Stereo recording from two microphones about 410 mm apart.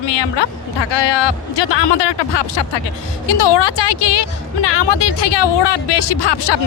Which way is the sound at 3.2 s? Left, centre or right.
Left.